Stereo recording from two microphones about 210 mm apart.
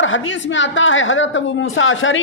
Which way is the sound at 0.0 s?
65° left (ahead or behind).